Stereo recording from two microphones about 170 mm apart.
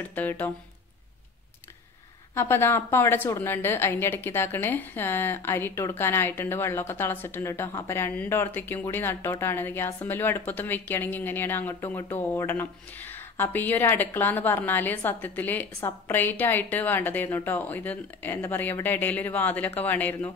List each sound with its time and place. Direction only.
0.1 s a woman's voice: 10° left (ahead or behind)
2.3 s a woman's voice: 15° left (ahead or behind)